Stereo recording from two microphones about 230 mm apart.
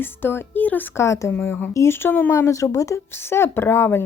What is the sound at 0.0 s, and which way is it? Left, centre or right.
Speech, centre.